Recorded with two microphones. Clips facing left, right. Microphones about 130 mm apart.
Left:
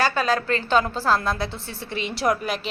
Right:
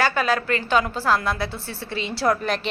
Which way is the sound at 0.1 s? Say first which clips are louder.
Even; 25° left (ahead or behind).